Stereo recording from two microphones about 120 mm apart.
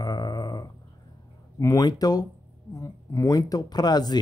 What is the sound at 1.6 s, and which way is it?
Speech, 30° left (ahead or behind).